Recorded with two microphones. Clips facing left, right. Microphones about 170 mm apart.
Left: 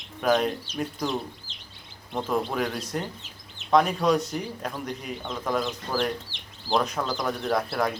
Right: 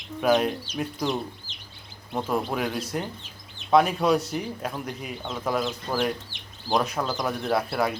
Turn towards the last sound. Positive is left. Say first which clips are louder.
# right 1 dB
turn(degrees=-5)  # may be behind; listen again after turning